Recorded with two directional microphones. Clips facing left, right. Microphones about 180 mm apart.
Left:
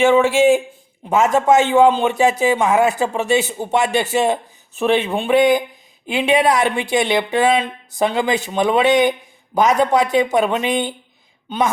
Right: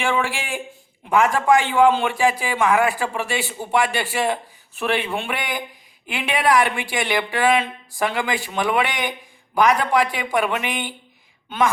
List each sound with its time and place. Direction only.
0.0 s a man's voice: 20° left (ahead or behind)